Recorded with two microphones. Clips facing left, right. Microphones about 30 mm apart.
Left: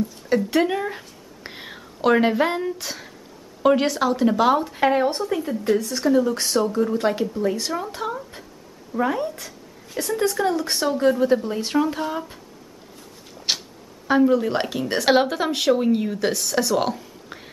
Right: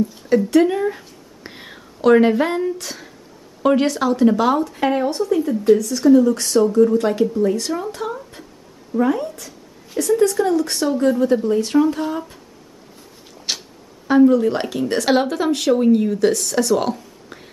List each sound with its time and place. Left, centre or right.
0.5 s speech: centre
14.0 s speech: centre